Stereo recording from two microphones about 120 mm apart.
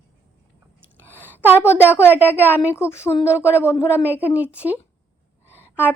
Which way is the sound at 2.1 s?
15° right (ahead or behind).